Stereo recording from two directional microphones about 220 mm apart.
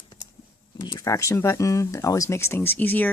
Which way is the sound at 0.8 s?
20° left (ahead or behind).